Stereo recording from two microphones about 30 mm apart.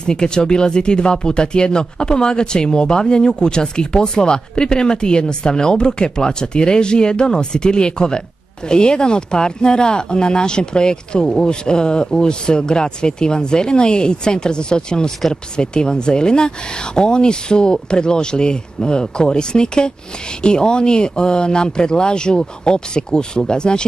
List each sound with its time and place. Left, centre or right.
0.0 s speech: left